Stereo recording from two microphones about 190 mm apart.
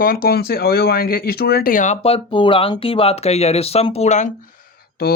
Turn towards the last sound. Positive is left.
turn(degrees=50)  # may be behind; listen again after turning